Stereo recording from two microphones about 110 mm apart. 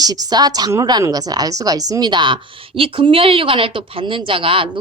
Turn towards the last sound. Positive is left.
turn(degrees=-55)  # may be behind; listen again after turning